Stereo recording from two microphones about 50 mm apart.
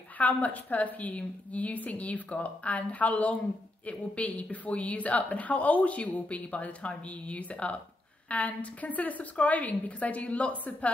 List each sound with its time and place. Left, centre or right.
0.2 s a woman's voice: left